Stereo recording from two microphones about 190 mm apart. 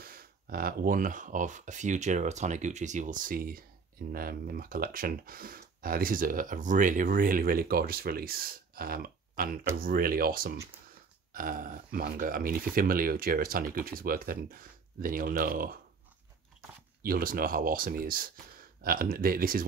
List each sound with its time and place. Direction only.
0.0 s speech: 50° right (ahead or behind)
17.0 s speech: 50° right (ahead or behind)